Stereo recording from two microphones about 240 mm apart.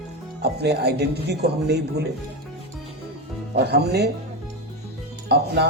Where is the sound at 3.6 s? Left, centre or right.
Right.